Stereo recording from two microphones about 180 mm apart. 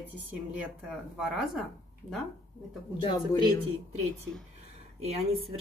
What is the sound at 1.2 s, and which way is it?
Speech, centre (ahead or behind).